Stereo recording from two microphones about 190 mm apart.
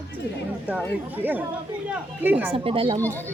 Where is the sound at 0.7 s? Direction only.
10° right (ahead or behind).